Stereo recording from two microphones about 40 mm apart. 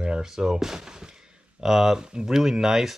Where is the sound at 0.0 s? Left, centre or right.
Centre.